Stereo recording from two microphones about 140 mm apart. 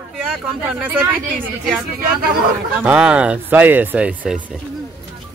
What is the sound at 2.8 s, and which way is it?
Speech, 10° right (ahead or behind).